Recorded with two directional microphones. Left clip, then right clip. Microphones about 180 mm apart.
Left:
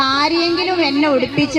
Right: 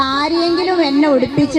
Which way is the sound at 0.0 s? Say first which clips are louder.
Even; 25° right (ahead or behind).